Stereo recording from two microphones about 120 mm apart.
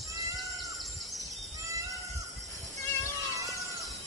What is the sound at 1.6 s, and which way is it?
Cat, 25° right (ahead or behind).